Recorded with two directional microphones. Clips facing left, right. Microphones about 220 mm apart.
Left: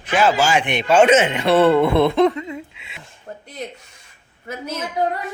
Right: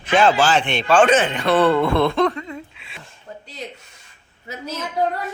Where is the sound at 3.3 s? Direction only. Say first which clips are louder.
Left 2 dB; 50° left (ahead or behind).